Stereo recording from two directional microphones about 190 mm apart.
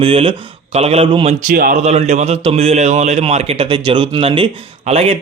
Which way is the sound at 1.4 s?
50° right (ahead or behind).